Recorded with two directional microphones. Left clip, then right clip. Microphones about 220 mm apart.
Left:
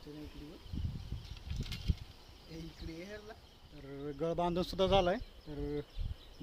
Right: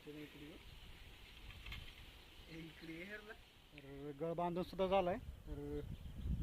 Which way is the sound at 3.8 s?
5° left (ahead or behind).